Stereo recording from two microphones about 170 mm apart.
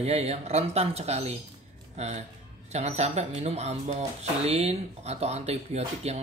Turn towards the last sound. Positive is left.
turn(degrees=-40)  # may be behind; listen again after turning